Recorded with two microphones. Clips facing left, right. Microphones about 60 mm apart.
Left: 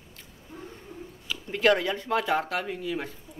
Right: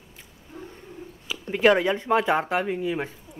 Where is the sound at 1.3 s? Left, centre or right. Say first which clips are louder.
Right 3 dB; centre.